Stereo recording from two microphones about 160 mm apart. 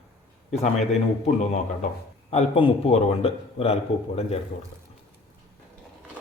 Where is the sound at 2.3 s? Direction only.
40° left (ahead or behind).